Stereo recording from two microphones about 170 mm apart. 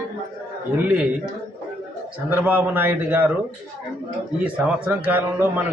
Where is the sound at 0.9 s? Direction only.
5° right (ahead or behind).